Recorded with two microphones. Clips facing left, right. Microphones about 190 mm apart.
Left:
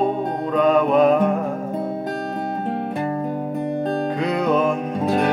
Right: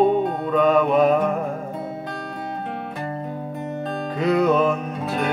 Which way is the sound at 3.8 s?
55° left (ahead or behind).